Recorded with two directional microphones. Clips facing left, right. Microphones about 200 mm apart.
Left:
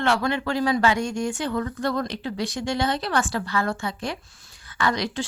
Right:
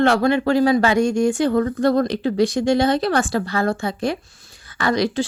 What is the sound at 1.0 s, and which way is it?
Speech, 10° right (ahead or behind).